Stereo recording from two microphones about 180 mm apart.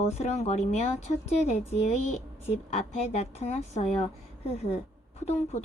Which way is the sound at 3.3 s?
40° left (ahead or behind).